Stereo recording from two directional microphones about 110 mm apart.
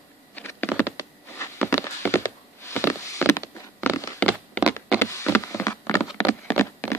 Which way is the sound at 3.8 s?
15° left (ahead or behind).